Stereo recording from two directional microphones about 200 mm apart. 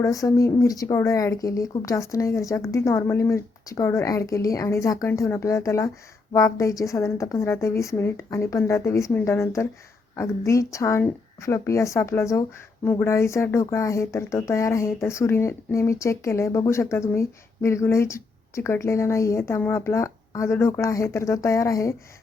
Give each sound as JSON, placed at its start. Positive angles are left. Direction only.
{"t": 0.0, "sound": "speech", "side_deg": 15}